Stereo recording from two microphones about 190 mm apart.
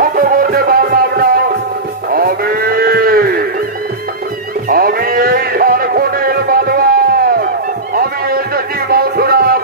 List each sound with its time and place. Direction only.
0.0 s music: 50° right (ahead or behind)
2.1 s livestock: 50° right (ahead or behind)
4.6 s music: 50° right (ahead or behind)
7.9 s a sound: 50° right (ahead or behind)